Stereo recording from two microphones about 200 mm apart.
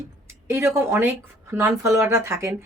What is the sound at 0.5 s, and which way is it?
Speech, 15° right (ahead or behind).